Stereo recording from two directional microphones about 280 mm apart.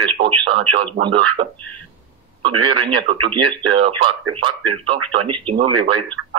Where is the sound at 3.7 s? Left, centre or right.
Centre.